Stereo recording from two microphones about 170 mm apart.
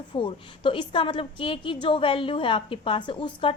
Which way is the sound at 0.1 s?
30° left (ahead or behind).